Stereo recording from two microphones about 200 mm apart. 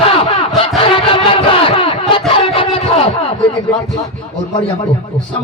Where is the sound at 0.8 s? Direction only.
25° left (ahead or behind).